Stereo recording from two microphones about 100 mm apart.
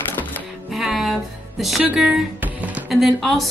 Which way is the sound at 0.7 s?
Centre (ahead or behind).